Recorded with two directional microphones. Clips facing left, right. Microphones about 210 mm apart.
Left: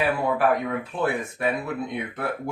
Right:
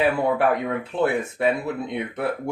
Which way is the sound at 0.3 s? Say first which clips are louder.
Right 1 dB; 25° right (ahead or behind).